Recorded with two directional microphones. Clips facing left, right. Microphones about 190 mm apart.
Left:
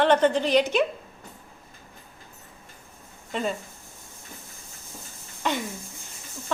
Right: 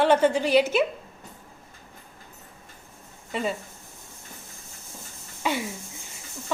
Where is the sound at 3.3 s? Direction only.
5° right (ahead or behind).